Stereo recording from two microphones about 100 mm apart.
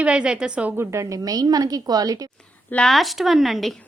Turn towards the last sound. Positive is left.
turn(degrees=0)  # may be behind; listen again after turning